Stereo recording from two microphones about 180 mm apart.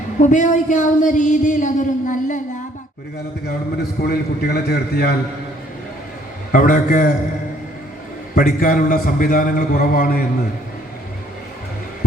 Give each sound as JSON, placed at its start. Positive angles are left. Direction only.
{"t": 0.2, "sound": "speech", "side_deg": 45}
{"t": 4.0, "sound": "a man's voice", "side_deg": 60}
{"t": 6.5, "sound": "speech", "side_deg": 50}
{"t": 8.4, "sound": "speech", "side_deg": 50}